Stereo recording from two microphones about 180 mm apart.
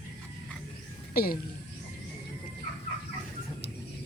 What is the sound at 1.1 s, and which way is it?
Speech, 55° left (ahead or behind).